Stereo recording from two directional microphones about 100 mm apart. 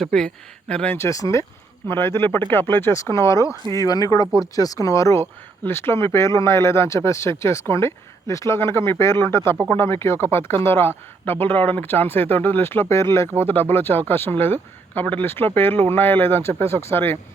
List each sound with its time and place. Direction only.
0.0 s speech: 5° left (ahead or behind)
0.9 s speech: 30° left (ahead or behind)